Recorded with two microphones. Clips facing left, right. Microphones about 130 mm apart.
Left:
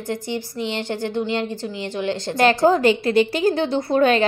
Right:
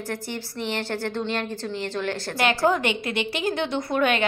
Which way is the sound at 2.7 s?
35° left (ahead or behind).